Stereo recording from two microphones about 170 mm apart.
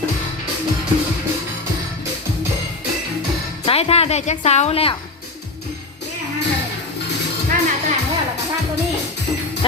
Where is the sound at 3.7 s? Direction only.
35° left (ahead or behind).